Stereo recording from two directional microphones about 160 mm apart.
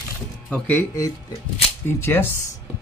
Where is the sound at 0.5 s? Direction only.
10° left (ahead or behind).